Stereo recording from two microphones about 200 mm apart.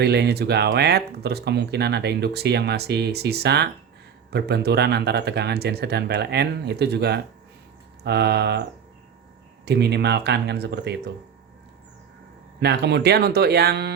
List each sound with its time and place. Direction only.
0.0 s speech: 55° right (ahead or behind)
9.6 s speech: 55° right (ahead or behind)
12.5 s speech: 55° right (ahead or behind)